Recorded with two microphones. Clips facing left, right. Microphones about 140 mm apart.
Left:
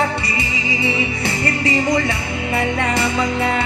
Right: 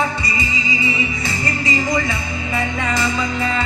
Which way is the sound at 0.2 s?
65° left (ahead or behind).